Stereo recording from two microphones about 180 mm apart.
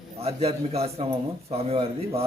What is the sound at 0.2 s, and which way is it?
A man's voice, 35° right (ahead or behind).